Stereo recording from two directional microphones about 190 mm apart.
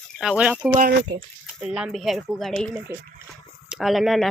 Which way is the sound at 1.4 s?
5° right (ahead or behind).